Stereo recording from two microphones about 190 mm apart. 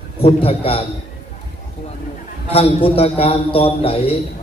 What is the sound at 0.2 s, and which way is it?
Speech, 30° left (ahead or behind).